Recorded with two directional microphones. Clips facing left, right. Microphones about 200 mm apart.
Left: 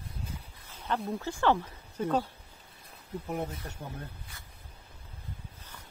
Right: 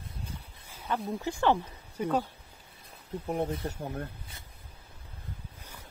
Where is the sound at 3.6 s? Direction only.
30° right (ahead or behind).